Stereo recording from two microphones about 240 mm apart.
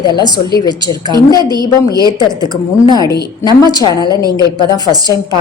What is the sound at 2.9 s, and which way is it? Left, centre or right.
Speech, centre.